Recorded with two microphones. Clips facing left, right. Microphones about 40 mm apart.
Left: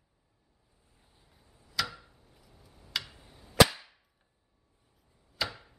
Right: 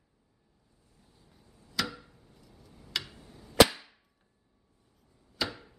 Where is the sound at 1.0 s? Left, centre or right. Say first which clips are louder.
Right 3 dB; left.